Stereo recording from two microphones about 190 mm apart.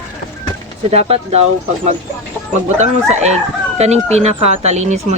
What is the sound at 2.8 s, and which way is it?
Speech, 35° right (ahead or behind).